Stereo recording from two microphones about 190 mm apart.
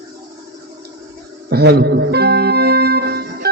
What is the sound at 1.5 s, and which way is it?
Music, 55° right (ahead or behind).